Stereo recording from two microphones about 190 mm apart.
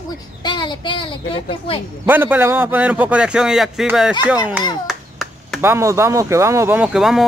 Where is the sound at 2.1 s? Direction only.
10° right (ahead or behind).